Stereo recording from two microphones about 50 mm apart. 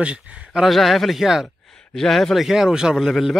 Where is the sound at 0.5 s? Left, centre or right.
Centre.